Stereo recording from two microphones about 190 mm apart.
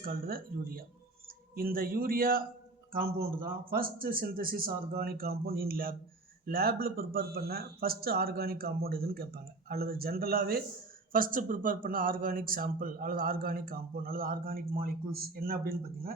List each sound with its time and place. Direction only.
0.0 s speech: 50° right (ahead or behind)